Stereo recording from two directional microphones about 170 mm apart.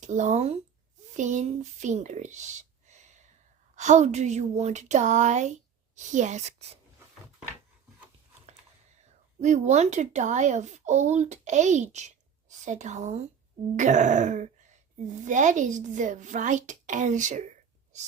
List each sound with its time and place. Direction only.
0.0 s speech: 45° right (ahead or behind)
9.4 s speech: 40° right (ahead or behind)